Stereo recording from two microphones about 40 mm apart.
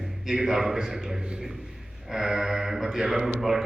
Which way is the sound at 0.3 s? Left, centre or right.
Centre.